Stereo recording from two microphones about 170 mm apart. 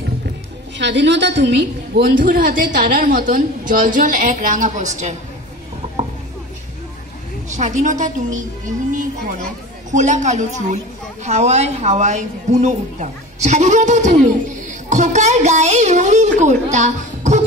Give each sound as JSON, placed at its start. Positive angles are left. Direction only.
{"t": 0.7, "sound": "a woman's voice", "side_deg": -90}
{"t": 7.4, "sound": "a woman's voice", "side_deg": -45}